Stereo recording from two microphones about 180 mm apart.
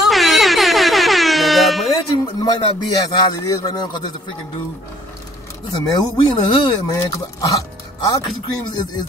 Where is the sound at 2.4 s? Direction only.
25° left (ahead or behind).